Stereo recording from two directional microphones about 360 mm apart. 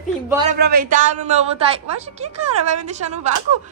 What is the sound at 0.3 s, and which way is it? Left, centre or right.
Speech, centre.